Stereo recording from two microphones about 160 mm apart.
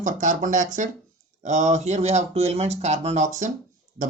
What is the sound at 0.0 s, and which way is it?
Speech, 55° right (ahead or behind).